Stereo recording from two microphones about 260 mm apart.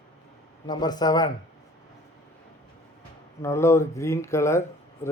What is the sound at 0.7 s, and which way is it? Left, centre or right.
Speech, centre.